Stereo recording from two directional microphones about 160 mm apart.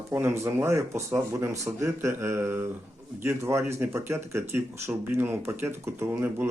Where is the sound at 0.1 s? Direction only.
15° right (ahead or behind).